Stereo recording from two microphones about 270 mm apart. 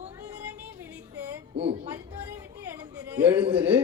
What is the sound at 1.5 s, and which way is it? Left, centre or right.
Speech, right.